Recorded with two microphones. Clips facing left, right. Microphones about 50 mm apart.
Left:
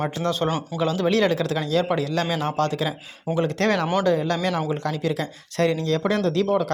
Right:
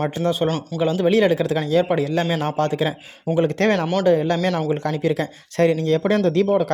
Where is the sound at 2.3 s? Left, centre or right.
Right.